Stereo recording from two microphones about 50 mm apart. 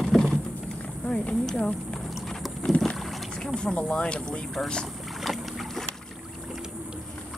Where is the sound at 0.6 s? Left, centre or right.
Left.